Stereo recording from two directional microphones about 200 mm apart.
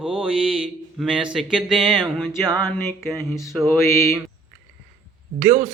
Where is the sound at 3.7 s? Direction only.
15° left (ahead or behind).